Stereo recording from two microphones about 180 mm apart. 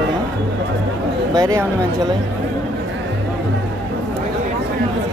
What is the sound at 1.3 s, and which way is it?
Speech, 20° right (ahead or behind).